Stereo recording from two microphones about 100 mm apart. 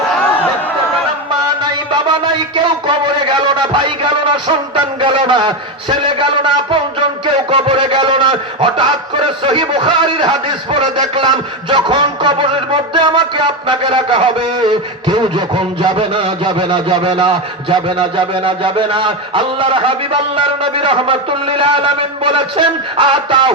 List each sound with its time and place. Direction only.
1.3 s music: 45° right (ahead or behind)
7.3 s a man's voice: 60° right (ahead or behind)
14.5 s a sound: 45° right (ahead or behind)